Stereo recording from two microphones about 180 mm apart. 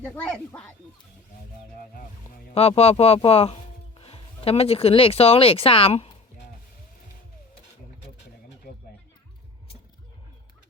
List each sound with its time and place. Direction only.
0.0 s speech: 10° left (ahead or behind)
2.6 s speech: 35° left (ahead or behind)